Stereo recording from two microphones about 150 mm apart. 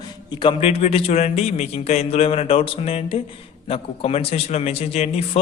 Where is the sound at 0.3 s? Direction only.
35° left (ahead or behind).